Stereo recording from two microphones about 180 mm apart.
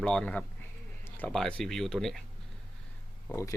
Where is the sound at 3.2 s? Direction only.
15° left (ahead or behind).